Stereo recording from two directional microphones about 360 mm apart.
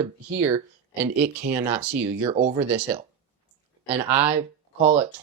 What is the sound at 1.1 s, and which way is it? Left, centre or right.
Speech, centre.